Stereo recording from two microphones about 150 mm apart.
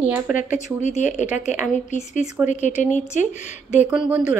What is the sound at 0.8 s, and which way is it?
A woman's voice, 50° left (ahead or behind).